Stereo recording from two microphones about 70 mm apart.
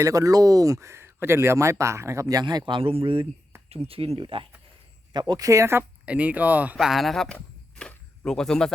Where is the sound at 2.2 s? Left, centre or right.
Right.